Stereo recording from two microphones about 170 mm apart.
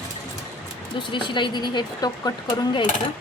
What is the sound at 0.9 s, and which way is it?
Speech, 30° left (ahead or behind).